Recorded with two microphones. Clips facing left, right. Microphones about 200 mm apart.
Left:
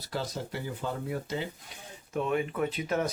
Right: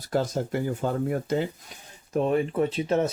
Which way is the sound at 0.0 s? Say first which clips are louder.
Right 9 dB; 50° right (ahead or behind).